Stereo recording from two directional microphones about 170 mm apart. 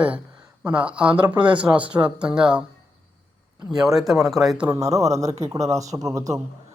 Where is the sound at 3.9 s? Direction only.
Centre (ahead or behind).